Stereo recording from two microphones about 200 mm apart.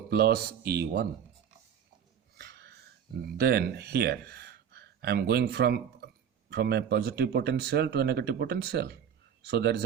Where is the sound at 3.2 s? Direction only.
50° right (ahead or behind).